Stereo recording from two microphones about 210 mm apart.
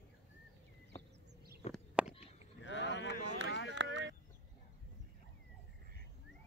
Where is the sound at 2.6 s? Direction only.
60° left (ahead or behind).